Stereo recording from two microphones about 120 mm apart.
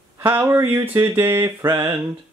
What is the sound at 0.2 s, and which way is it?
Speech, 15° right (ahead or behind).